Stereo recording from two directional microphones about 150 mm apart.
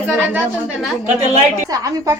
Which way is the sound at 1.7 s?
25° right (ahead or behind).